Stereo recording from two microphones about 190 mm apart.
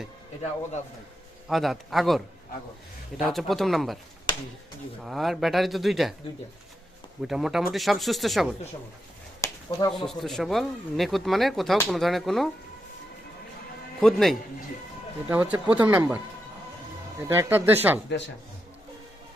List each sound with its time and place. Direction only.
1.5 s speech: centre (ahead or behind)
5.0 s speech: centre (ahead or behind)
7.3 s speech: centre (ahead or behind)
9.4 s a sound: 20° left (ahead or behind)
10.1 s speech: centre (ahead or behind)
14.0 s speech: centre (ahead or behind)
15.3 s speech: 10° right (ahead or behind)